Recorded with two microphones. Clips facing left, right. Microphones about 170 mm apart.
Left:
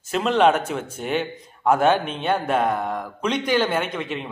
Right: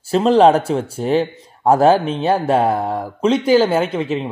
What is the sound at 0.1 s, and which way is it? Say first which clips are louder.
Speech: right 7 dB; 35° right (ahead or behind).